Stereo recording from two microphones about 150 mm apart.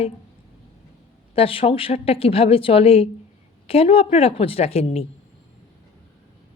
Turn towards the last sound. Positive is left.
turn(degrees=40)  # may be behind; listen again after turning